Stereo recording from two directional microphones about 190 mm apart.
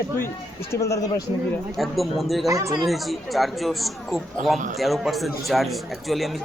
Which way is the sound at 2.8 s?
Centre (ahead or behind).